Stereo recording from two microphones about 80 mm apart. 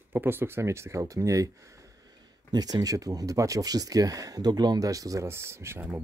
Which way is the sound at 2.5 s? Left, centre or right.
Right.